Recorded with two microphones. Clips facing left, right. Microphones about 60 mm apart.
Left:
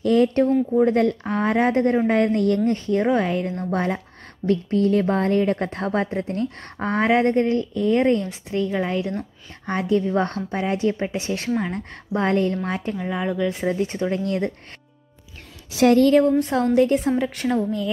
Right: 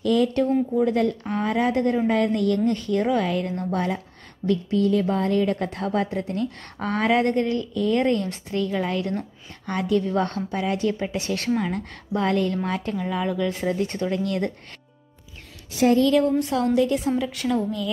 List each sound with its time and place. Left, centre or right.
0.0 s a woman's voice: left
3.7 s a woman's voice: left; by 11.8 s centre
11.9 s a woman's voice: left
12.9 s a woman's voice: centre
15.7 s a woman's voice: left
16.0 s a woman's voice: left